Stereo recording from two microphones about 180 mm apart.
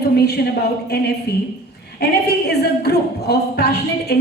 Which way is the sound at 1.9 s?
65° left (ahead or behind).